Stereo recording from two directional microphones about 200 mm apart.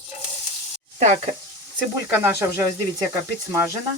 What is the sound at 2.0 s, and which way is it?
Speech, 10° right (ahead or behind).